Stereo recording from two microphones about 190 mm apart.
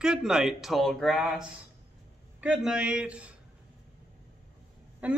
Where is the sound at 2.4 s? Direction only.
5° right (ahead or behind).